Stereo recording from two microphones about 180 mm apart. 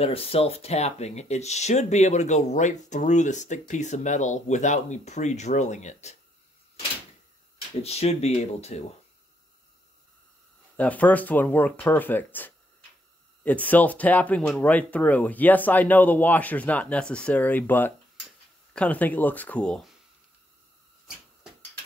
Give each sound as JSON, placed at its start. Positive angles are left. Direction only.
{"t": 0.0, "sound": "speech", "side_deg": 35}
{"t": 7.8, "sound": "speech", "side_deg": 35}
{"t": 10.8, "sound": "speech", "side_deg": 10}